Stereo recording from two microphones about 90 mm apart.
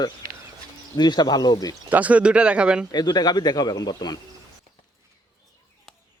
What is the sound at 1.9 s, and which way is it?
Speech, 15° right (ahead or behind).